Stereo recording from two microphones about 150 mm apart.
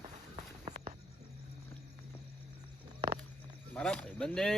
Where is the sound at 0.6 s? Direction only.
45° right (ahead or behind).